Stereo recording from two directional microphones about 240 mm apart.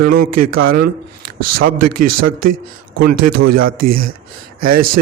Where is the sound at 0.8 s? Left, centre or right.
Right.